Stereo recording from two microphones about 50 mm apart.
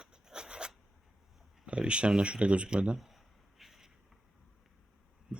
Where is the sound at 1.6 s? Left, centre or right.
Right.